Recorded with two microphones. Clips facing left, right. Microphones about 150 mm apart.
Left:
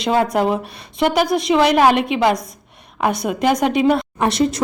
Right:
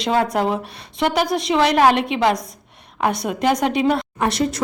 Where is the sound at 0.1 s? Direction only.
15° left (ahead or behind).